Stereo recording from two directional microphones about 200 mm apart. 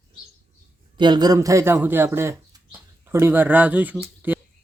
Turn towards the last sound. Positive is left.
turn(degrees=-5)  # may be behind; listen again after turning